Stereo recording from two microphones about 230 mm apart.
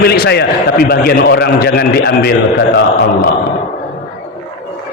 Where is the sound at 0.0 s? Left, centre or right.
Left.